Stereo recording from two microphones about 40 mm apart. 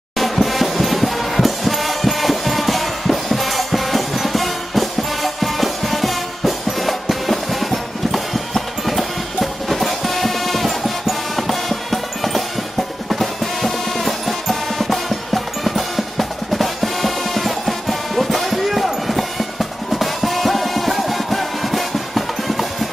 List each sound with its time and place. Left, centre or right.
0.2 s music: centre